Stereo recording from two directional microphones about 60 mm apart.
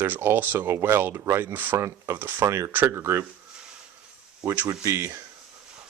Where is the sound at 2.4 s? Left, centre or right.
Right.